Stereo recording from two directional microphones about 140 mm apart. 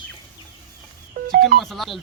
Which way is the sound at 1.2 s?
90° right.